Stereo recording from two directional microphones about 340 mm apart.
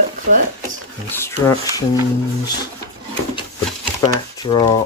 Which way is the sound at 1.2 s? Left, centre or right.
Centre.